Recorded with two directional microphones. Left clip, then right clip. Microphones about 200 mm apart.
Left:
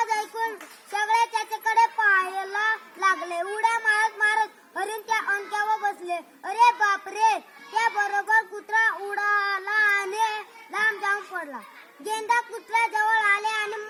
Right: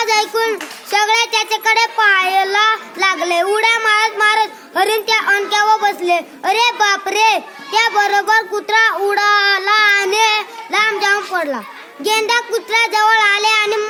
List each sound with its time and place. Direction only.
0.0 s a sound: 25° right (ahead or behind)
0.9 s child singing: 25° right (ahead or behind)
5.3 s a woman's voice: 25° right (ahead or behind)
12.0 s child singing: 20° right (ahead or behind)